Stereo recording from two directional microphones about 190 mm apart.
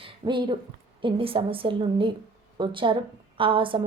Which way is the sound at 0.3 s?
25° right (ahead or behind).